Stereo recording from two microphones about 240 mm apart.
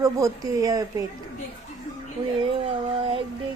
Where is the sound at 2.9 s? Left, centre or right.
Right.